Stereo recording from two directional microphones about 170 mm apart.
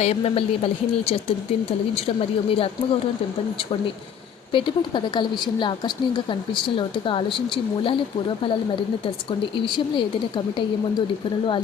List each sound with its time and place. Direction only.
0.0 s a woman's voice: 35° left (ahead or behind)
2.0 s a woman's voice: 35° left (ahead or behind)
4.5 s speech: 30° left (ahead or behind)
9.6 s speech: 30° left (ahead or behind)